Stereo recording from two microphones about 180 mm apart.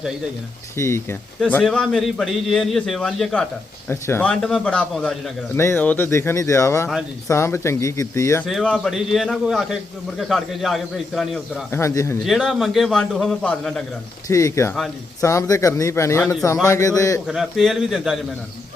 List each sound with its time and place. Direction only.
0.8 s a man's voice: 15° left (ahead or behind)
8.4 s a man's voice: centre (ahead or behind)
11.7 s speech: 15° left (ahead or behind)
12.2 s a man's voice: centre (ahead or behind)
14.3 s speech: 15° left (ahead or behind)
17.2 s a man's voice: centre (ahead or behind)